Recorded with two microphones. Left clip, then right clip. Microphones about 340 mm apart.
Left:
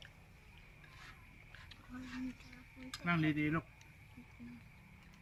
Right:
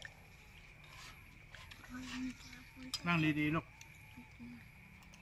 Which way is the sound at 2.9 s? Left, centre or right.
Centre.